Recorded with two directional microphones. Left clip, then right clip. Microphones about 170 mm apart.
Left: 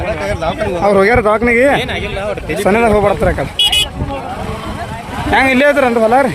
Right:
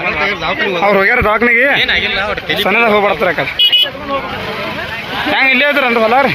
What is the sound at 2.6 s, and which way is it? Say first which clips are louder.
Speech: even; 30° left (ahead or behind).